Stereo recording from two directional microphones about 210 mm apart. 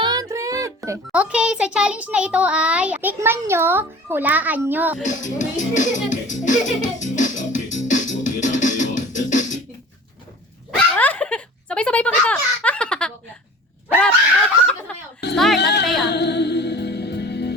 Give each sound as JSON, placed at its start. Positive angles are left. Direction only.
{"t": 0.0, "sound": "a child's voice", "side_deg": -20}
{"t": 5.0, "sound": "music", "side_deg": 35}
{"t": 10.9, "sound": "a sound", "side_deg": 5}
{"t": 15.2, "sound": "music", "side_deg": 55}
{"t": 15.5, "sound": "speech", "side_deg": 55}
{"t": 16.0, "sound": "music", "side_deg": 55}